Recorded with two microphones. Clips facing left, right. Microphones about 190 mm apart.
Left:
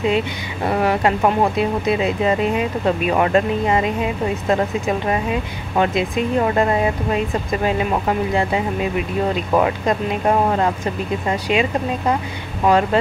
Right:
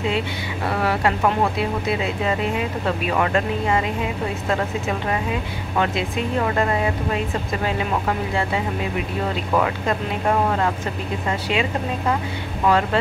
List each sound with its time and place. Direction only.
0.7 s speech: 20° left (ahead or behind)
5.8 s speech: 20° left (ahead or behind)
9.5 s speech: 25° left (ahead or behind)
12.6 s speech: 20° left (ahead or behind)